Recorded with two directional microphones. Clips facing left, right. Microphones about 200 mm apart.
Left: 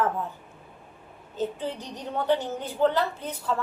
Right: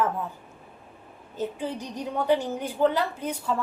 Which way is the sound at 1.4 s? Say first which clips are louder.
Even; 10° right (ahead or behind).